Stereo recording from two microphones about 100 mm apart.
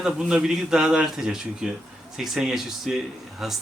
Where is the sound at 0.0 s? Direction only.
5° right (ahead or behind).